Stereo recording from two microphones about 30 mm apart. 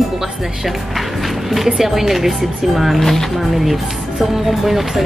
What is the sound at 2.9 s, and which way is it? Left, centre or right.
Speech, centre.